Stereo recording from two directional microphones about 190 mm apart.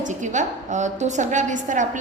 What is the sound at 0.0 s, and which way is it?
A woman's voice, 40° right (ahead or behind).